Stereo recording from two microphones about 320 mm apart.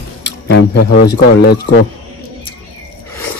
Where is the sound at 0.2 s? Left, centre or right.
Left.